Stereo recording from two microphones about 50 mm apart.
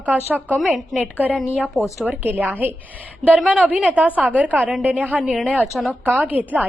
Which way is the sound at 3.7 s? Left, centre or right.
Right.